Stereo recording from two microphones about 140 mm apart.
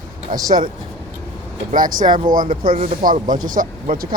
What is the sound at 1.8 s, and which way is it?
Speech, 75° right (ahead or behind).